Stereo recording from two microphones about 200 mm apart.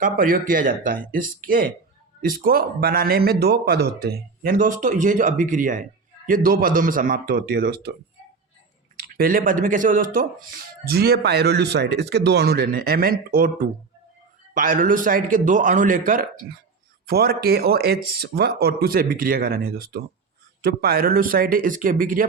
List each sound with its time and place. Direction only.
0.0 s a man's voice: 45° right (ahead or behind)
9.1 s a man's voice: 45° right (ahead or behind)